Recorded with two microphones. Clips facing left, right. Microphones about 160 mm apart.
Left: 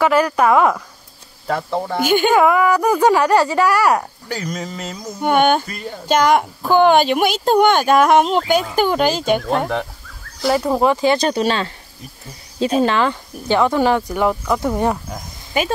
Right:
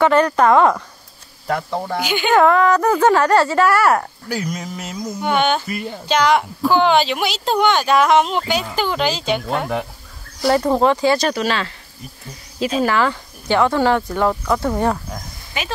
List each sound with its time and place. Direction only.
0.0 s speech: 5° left (ahead or behind)
2.0 s speech: 50° left (ahead or behind)
2.3 s speech: 10° left (ahead or behind)
4.3 s speech: 5° right (ahead or behind)
5.2 s speech: 50° left (ahead or behind)
5.7 s a sound: 10° right (ahead or behind)
6.0 s speech: 50° left (ahead or behind)
10.4 s speech: centre (ahead or behind)
10.8 s speech: 15° left (ahead or behind)
12.8 s speech: 20° left (ahead or behind)